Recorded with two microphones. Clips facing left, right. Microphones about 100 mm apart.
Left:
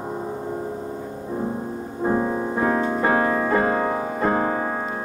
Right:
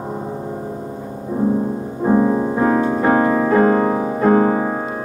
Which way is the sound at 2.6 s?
5° right (ahead or behind).